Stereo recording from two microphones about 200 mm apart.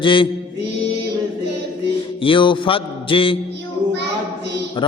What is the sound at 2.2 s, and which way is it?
Mantra, 25° left (ahead or behind).